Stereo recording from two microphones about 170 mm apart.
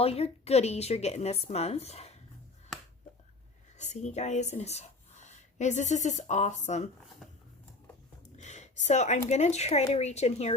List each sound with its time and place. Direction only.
0.0 s a woman's voice: 35° left (ahead or behind)
3.8 s speech: 40° left (ahead or behind)
8.4 s a sound: 45° left (ahead or behind)
9.3 s a woman's voice: 40° left (ahead or behind)